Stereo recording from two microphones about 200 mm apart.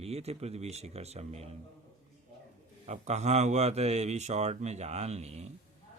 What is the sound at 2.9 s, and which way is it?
Mantra, 35° right (ahead or behind).